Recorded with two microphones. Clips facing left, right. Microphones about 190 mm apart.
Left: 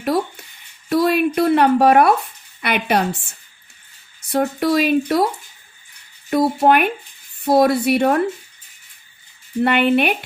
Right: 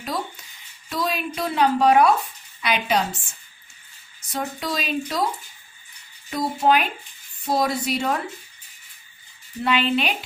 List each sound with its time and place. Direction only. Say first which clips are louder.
0.0 s a sound: left 9 dB; 60° left (ahead or behind)
0.9 s speech: left 10 dB; 60° left (ahead or behind)
6.3 s speech: left 5 dB; 60° left (ahead or behind)
9.6 s speech: left 6 dB; 60° left (ahead or behind)